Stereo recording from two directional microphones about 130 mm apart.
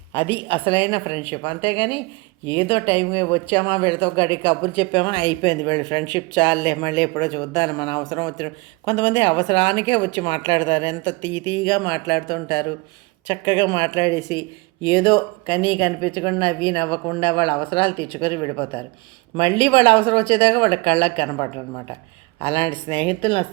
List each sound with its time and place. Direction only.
0.1 s speech: 45° left (ahead or behind)
22.4 s speech: 45° left (ahead or behind)